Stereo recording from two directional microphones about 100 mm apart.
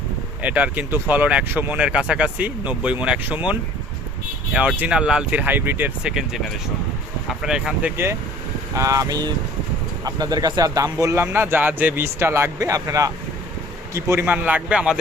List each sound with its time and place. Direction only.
0.4 s speech: 15° right (ahead or behind)
6.0 s speech: 5° right (ahead or behind)
8.7 s speech: 30° right (ahead or behind)
11.1 s speech: 25° right (ahead or behind)